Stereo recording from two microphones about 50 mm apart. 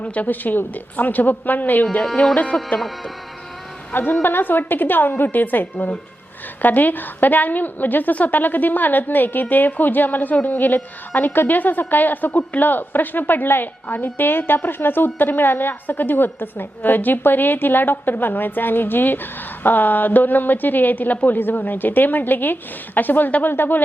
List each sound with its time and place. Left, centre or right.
0.0 s a woman's voice: left
2.7 s speech: centre
3.9 s a woman's voice: left